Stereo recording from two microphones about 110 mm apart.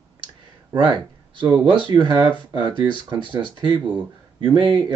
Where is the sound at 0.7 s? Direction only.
50° right (ahead or behind).